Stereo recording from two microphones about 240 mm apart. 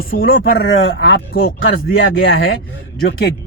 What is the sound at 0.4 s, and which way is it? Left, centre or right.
Speech, left.